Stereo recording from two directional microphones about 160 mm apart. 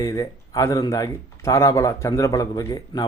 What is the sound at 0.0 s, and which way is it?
Speech, 20° left (ahead or behind).